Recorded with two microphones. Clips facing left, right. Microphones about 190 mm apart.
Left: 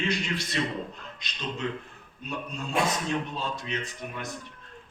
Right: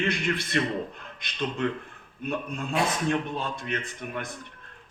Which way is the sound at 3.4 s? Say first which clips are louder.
Right 1 dB; 55° right (ahead or behind).